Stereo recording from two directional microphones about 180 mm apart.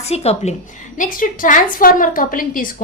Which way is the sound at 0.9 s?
50° left (ahead or behind).